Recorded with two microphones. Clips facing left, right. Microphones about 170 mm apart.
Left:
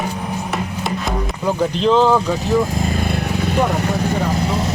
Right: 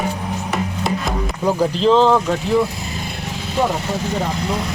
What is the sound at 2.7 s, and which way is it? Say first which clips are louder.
Vehicle: left 8 dB; 50° left (ahead or behind).